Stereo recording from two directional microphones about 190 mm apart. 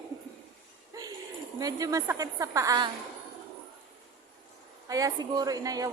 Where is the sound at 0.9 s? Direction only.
20° right (ahead or behind).